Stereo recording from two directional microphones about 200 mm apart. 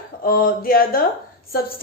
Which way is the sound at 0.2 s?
45° left (ahead or behind).